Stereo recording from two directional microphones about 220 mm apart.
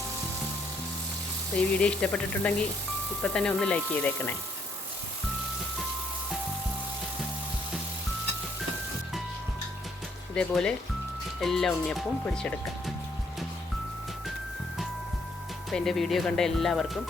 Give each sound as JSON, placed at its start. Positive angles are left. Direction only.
{"t": 1.5, "sound": "speech", "side_deg": 5}
{"t": 10.3, "sound": "speech", "side_deg": 5}
{"t": 15.7, "sound": "speech", "side_deg": 0}